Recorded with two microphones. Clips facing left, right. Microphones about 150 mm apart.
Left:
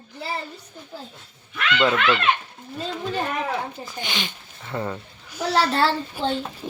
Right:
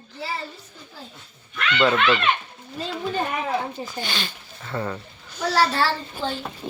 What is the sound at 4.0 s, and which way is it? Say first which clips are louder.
Speech: left 3 dB; 15° left (ahead or behind).